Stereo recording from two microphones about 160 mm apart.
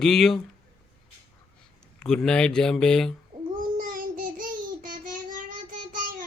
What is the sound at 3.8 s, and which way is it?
Child singing, 60° right (ahead or behind).